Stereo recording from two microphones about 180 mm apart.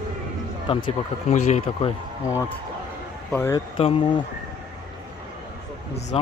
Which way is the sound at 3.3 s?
10° left (ahead or behind).